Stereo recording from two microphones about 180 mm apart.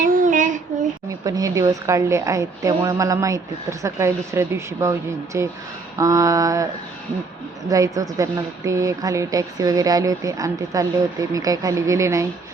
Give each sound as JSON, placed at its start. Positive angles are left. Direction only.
{"t": 0.0, "sound": "child singing", "side_deg": -50}
{"t": 1.2, "sound": "a woman's voice", "side_deg": -20}
{"t": 7.7, "sound": "a woman's voice", "side_deg": -20}